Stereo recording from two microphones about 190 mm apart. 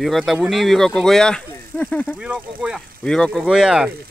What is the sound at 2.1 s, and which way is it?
Speech, 5° right (ahead or behind).